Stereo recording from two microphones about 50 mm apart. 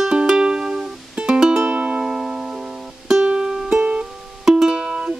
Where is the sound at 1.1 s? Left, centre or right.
Right.